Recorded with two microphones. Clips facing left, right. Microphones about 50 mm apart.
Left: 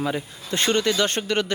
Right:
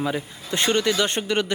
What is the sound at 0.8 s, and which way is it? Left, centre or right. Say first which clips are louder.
Speech: even; centre.